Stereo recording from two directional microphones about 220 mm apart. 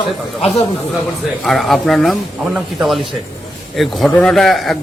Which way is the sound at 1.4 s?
Centre (ahead or behind).